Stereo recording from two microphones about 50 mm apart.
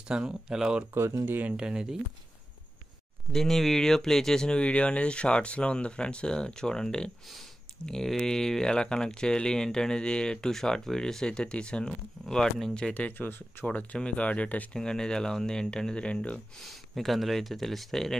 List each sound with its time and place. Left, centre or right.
0.1 s speech: centre
0.9 s speech: right
1.6 s speech: centre
3.3 s speech: centre
12.9 s speech: left
13.7 s speech: left
14.7 s speech: centre
16.6 s speech: centre